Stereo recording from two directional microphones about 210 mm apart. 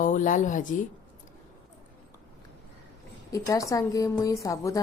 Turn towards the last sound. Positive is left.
turn(degrees=15)  # may be behind; listen again after turning